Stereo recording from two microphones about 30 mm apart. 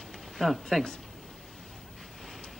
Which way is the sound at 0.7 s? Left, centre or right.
Centre.